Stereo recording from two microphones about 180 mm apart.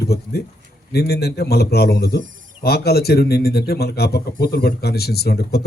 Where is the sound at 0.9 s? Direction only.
65° left (ahead or behind).